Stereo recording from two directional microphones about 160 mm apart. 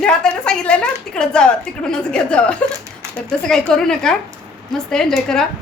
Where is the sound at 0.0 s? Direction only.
5° left (ahead or behind).